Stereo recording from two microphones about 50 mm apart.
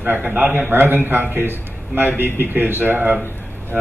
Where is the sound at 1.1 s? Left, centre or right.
Right.